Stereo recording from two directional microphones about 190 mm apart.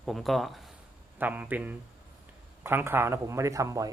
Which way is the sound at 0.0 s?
Centre (ahead or behind).